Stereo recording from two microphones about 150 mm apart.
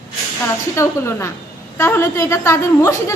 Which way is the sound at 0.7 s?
15° left (ahead or behind).